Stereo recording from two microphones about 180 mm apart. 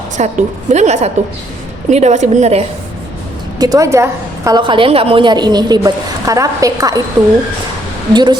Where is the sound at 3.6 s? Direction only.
20° right (ahead or behind).